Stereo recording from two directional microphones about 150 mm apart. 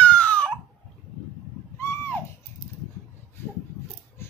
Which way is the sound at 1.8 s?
20° left (ahead or behind).